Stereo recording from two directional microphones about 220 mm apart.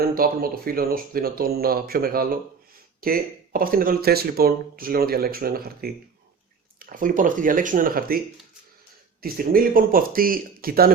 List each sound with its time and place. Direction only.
0.0 s speech: 40° right (ahead or behind)
9.2 s speech: 40° right (ahead or behind)